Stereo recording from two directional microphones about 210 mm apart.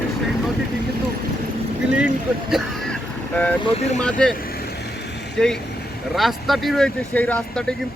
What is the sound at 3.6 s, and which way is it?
Speech, 30° left (ahead or behind).